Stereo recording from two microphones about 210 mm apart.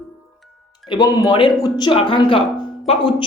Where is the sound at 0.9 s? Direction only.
20° left (ahead or behind).